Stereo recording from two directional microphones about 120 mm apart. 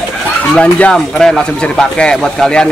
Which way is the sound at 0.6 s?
10° left (ahead or behind).